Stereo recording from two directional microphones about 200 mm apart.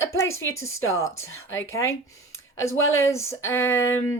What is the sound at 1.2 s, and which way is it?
Speech, 90° left.